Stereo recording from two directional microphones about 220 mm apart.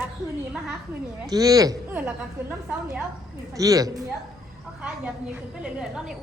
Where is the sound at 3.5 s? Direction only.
15° right (ahead or behind).